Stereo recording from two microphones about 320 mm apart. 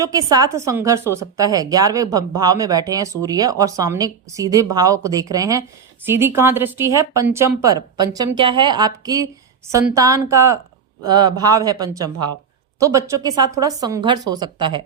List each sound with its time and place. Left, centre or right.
0.0 s speech: centre